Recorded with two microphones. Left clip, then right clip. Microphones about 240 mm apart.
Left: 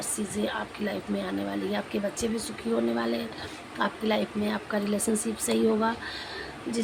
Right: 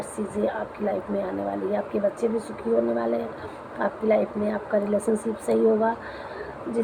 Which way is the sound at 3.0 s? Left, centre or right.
Left.